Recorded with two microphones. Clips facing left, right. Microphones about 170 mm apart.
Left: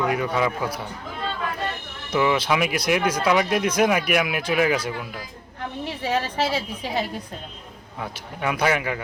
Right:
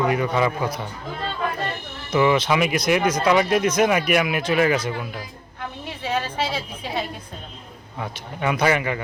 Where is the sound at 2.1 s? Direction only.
5° left (ahead or behind).